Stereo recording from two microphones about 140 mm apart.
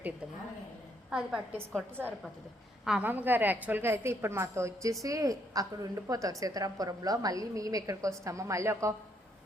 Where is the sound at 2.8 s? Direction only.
10° right (ahead or behind).